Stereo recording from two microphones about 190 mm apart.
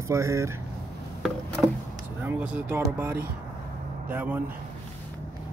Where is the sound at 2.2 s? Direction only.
10° right (ahead or behind).